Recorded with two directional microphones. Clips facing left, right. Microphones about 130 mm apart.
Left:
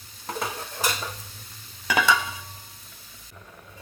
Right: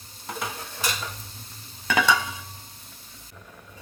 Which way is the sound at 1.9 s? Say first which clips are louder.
Even; 5° left (ahead or behind).